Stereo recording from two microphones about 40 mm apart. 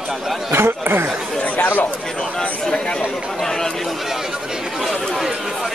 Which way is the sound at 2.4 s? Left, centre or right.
Centre.